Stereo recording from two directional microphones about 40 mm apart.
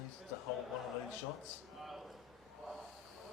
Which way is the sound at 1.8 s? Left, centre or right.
Centre.